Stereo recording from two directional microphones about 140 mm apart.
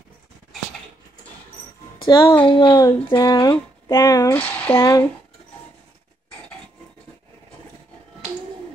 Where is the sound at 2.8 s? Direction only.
25° left (ahead or behind).